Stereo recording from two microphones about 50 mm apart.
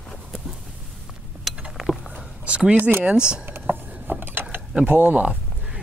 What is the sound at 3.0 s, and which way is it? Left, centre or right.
Speech, centre.